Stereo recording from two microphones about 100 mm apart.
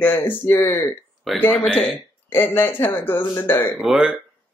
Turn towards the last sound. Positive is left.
turn(degrees=-5)  # may be behind; listen again after turning